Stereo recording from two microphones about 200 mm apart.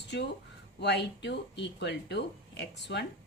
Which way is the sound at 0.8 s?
60° left (ahead or behind).